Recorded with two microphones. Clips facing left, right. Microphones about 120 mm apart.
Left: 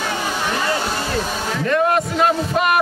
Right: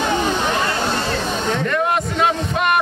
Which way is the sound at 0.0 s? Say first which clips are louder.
Right 4 dB; 20° right (ahead or behind).